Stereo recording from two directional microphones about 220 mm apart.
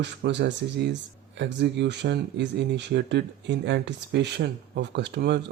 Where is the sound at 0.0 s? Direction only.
50° right (ahead or behind).